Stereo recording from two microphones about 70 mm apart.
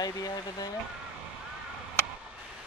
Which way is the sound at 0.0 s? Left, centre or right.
Left.